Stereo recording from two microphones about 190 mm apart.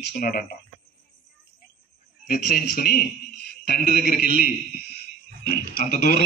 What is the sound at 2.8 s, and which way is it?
A man's voice, 55° left (ahead or behind).